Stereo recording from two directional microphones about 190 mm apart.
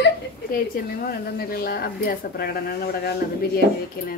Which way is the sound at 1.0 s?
50° left (ahead or behind).